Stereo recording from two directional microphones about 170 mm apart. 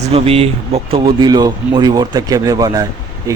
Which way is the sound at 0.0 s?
35° right (ahead or behind).